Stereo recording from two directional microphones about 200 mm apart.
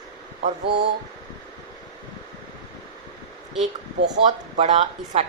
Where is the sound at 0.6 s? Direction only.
55° right (ahead or behind).